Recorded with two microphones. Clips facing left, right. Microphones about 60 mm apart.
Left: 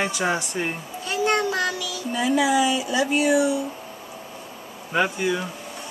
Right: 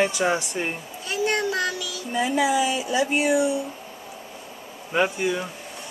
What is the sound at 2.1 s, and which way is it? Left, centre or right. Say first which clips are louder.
Speech: left 1 dB; right.